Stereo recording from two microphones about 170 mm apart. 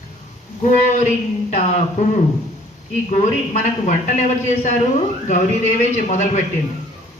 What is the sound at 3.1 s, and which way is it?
Speech, 45° left (ahead or behind).